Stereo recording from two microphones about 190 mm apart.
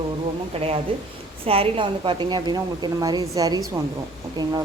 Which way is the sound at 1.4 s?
30° right (ahead or behind).